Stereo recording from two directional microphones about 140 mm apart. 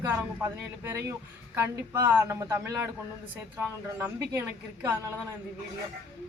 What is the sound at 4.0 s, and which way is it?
Speech, 20° right (ahead or behind).